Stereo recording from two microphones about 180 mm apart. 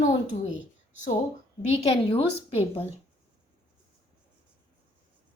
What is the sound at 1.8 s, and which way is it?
A woman's voice, 30° left (ahead or behind).